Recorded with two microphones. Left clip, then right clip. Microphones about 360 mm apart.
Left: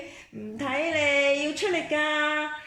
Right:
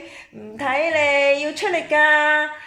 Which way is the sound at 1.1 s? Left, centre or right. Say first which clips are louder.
Right 4 dB; right.